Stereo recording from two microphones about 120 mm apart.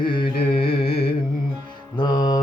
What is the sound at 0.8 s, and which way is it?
Carnatic music, 50° left (ahead or behind).